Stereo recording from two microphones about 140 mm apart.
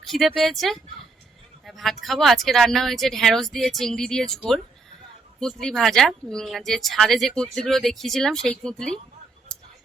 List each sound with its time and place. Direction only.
0.0 s speech: centre (ahead or behind)